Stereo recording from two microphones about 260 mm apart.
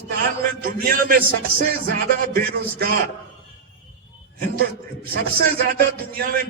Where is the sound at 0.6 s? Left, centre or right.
Right.